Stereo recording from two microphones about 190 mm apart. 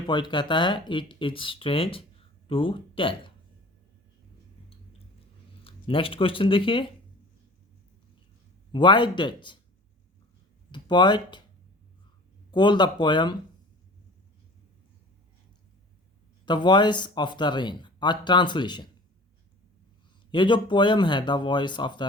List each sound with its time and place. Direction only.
0.1 s speech: 25° left (ahead or behind)
5.6 s speech: 30° left (ahead or behind)
8.7 s speech: 25° left (ahead or behind)
10.7 s speech: 25° left (ahead or behind)
12.5 s speech: 25° left (ahead or behind)
16.5 s speech: 25° left (ahead or behind)
20.3 s speech: 25° left (ahead or behind)